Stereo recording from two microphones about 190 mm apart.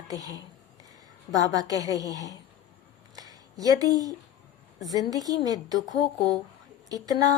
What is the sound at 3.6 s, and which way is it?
Speech, 20° right (ahead or behind).